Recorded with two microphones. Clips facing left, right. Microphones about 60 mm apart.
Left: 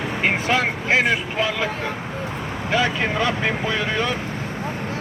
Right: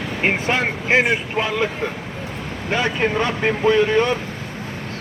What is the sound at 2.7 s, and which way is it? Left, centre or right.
Speech, right.